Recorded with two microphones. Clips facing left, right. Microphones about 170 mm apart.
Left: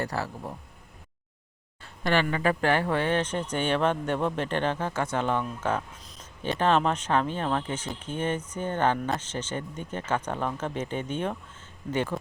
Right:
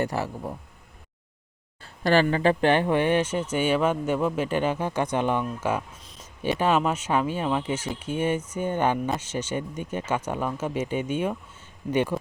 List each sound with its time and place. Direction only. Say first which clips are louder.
0.0 s speech: right 4 dB; 15° right (ahead or behind)
1.8 s speech: right 5 dB; 35° right (ahead or behind); by 12.1 s 15° right (ahead or behind)